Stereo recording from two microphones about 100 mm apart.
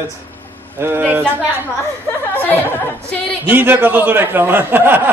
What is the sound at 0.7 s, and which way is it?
Speech, 20° right (ahead or behind).